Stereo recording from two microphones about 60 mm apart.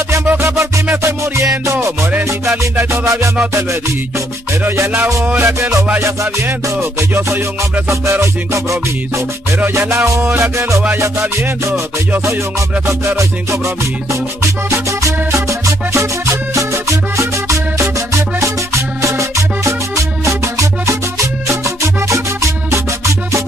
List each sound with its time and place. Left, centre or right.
0.6 s music: right
5.2 s music: right
5.6 s music: right
6.4 s music: right
7.9 s music: right
9.8 s music: right
13.0 s music: right
14.9 s music: right
15.9 s music: right
16.5 s music: right